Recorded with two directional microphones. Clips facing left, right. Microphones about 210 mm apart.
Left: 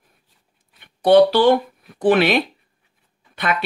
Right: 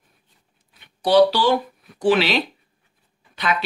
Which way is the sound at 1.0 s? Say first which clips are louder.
Left 4 dB; 55° left (ahead or behind).